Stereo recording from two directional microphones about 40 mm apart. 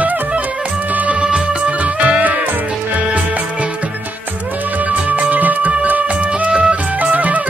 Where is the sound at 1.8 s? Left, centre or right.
Right.